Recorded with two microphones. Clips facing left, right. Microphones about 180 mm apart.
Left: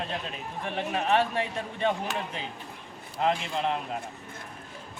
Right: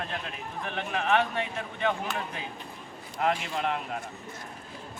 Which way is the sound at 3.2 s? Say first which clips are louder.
Left 1 dB; 25° left (ahead or behind).